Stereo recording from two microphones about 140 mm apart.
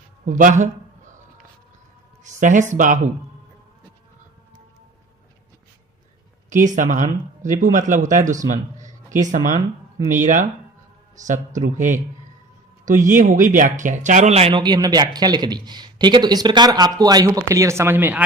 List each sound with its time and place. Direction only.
0.3 s speech: 65° right (ahead or behind)
2.2 s speech: 65° right (ahead or behind)
6.5 s speech: 65° right (ahead or behind); by 14.6 s 50° right (ahead or behind)
14.6 s speech: 30° right (ahead or behind); by 18.2 s 15° right (ahead or behind)